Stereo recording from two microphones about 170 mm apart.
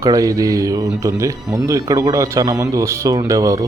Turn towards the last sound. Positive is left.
turn(degrees=-20)  # may be behind; listen again after turning